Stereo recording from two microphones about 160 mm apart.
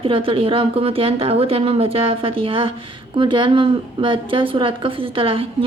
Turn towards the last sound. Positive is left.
turn(degrees=-35)  # may be behind; listen again after turning